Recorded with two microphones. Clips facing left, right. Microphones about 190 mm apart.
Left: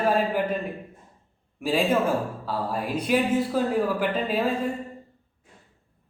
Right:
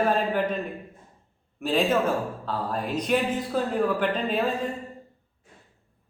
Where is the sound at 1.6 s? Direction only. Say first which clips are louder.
Even; 10° left (ahead or behind).